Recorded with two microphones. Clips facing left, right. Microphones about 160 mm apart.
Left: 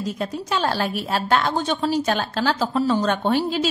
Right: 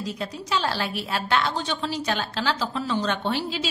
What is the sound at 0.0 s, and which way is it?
A woman's voice, 50° left (ahead or behind).